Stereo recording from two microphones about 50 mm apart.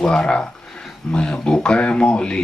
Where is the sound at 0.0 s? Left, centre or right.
Centre.